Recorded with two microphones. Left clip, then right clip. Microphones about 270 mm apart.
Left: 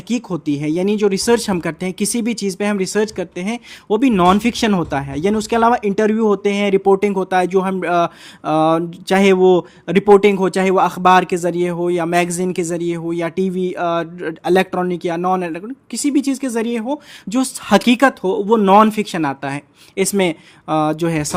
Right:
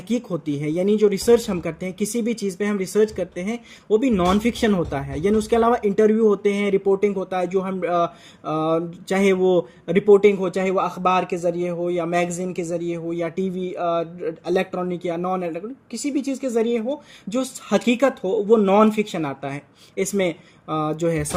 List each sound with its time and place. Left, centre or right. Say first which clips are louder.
0.1 s speech: left 4 dB; centre